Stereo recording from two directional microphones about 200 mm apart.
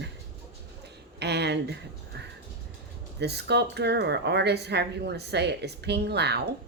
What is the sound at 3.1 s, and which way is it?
Speech, 55° right (ahead or behind).